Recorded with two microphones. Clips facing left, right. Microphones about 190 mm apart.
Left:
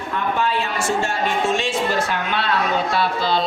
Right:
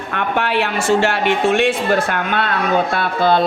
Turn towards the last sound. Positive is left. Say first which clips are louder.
# right 4 dB
turn(degrees=-55)  # may be behind; listen again after turning